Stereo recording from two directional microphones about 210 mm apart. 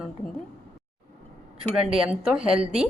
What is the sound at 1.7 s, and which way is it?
A woman's voice, 5° right (ahead or behind).